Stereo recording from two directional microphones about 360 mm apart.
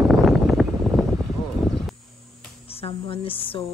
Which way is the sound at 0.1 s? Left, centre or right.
Centre.